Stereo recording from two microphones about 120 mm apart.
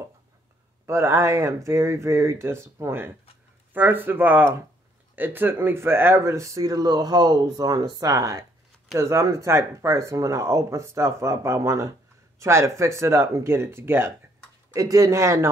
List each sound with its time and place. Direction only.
0.8 s speech: 20° right (ahead or behind)